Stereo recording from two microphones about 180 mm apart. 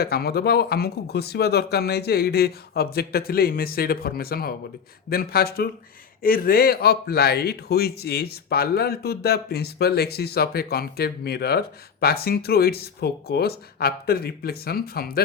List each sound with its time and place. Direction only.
0.0 s speech: 60° left (ahead or behind)